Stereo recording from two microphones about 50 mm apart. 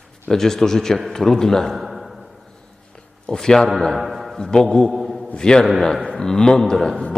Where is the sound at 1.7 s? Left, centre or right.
Centre.